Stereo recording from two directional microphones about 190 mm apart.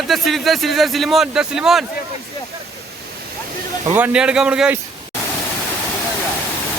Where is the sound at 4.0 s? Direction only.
5° right (ahead or behind).